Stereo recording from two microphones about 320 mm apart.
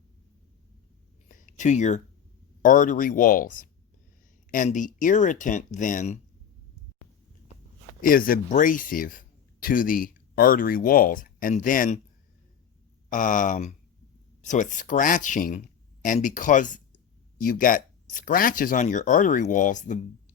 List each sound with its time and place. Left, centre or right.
1.3 s a sound: left
2.6 s speech: left
8.0 s speech: left
13.1 s speech: left